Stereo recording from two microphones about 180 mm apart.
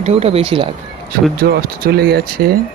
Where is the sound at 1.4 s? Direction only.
60° right (ahead or behind).